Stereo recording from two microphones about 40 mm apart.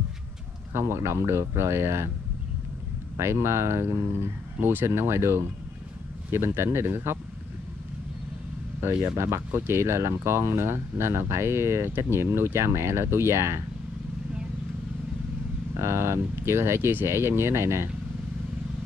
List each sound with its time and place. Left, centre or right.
0.7 s speech: right
3.2 s speech: right
9.5 s speech: right
15.8 s speech: right